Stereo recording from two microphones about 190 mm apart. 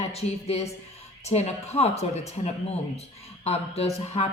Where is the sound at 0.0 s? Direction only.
35° left (ahead or behind).